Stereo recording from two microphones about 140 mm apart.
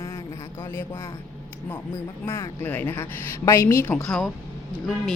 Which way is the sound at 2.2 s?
15° left (ahead or behind).